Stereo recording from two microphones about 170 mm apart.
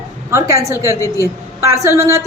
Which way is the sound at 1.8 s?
15° right (ahead or behind).